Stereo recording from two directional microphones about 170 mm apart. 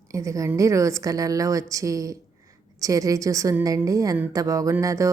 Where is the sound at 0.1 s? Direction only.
20° right (ahead or behind).